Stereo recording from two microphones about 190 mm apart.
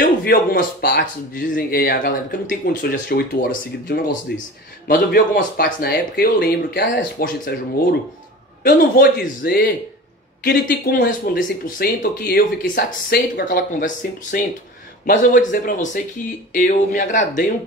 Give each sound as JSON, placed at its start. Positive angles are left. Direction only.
{"t": 0.0, "sound": "speech", "side_deg": 50}
{"t": 3.3, "sound": "speech", "side_deg": 65}
{"t": 4.8, "sound": "speech", "side_deg": 45}
{"t": 8.6, "sound": "speech", "side_deg": 45}